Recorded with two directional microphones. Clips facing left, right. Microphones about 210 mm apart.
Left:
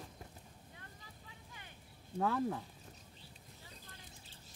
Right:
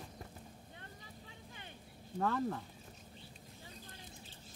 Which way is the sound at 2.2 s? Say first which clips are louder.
Left 1 dB; 5° left (ahead or behind).